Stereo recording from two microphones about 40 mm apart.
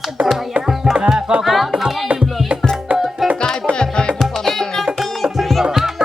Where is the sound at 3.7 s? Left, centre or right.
Left.